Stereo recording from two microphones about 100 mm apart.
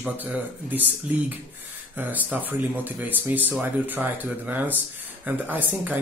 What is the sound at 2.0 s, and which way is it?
Speech, 15° right (ahead or behind).